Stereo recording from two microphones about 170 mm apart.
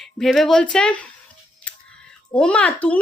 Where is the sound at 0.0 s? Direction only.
Centre (ahead or behind).